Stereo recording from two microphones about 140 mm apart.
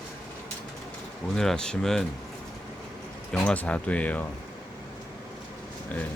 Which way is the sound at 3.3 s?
10° left (ahead or behind).